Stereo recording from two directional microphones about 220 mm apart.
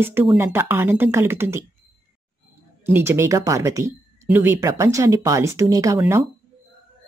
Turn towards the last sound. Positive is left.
turn(degrees=-15)  # may be behind; listen again after turning